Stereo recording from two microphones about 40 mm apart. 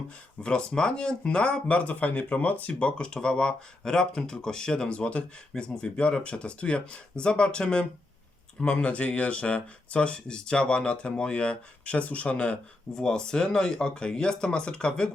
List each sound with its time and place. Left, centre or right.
0.4 s speech: left
2.7 s speech: left
12.9 s speech: centre